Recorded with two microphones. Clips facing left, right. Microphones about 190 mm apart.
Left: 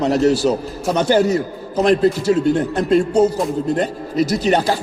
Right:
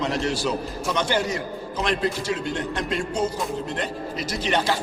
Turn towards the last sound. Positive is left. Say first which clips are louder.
# left 7 dB
turn(degrees=40)  # may be behind; listen again after turning